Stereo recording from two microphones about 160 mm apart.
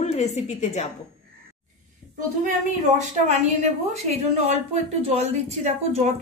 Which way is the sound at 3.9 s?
40° right (ahead or behind).